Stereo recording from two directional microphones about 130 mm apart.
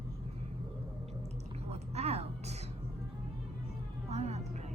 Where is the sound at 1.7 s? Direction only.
55° right (ahead or behind).